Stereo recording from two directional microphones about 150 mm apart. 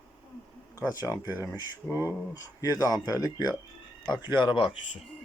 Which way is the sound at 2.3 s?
25° left (ahead or behind).